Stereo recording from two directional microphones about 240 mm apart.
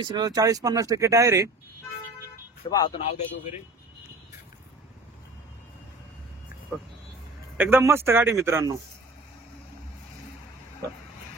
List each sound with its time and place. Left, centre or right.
0.0 s speech: centre
2.6 s speech: left
6.7 s speech: centre